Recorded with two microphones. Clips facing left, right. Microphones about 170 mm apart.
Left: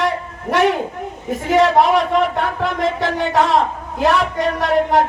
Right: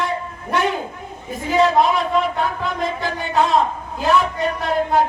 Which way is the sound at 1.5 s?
70° left (ahead or behind).